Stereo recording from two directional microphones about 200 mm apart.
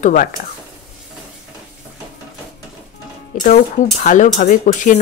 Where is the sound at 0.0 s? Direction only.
40° left (ahead or behind).